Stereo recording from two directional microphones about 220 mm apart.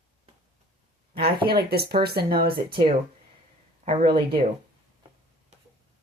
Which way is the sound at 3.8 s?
30° right (ahead or behind).